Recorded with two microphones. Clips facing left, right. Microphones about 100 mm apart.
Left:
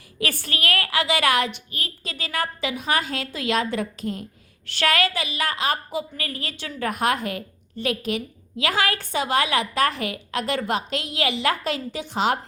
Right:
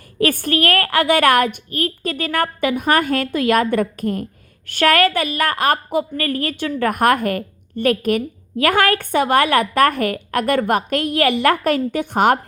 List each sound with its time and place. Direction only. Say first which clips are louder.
0.2 s a woman's voice: right 10 dB; 50° right (ahead or behind)